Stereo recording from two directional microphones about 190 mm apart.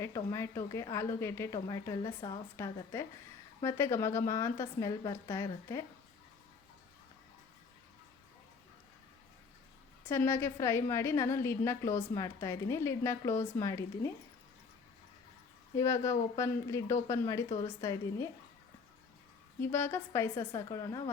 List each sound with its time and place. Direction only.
0.0 s a woman's voice: 15° left (ahead or behind)
10.1 s a woman's voice: 15° left (ahead or behind)
15.8 s a woman's voice: 15° left (ahead or behind)
19.6 s a woman's voice: 10° left (ahead or behind)